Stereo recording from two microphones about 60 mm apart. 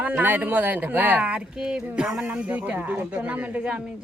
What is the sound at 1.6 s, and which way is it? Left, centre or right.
Speech, centre.